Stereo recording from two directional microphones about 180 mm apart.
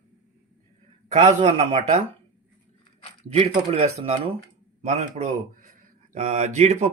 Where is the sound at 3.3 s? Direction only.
35° right (ahead or behind).